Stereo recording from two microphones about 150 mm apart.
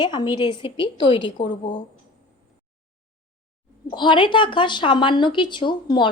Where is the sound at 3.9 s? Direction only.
30° left (ahead or behind).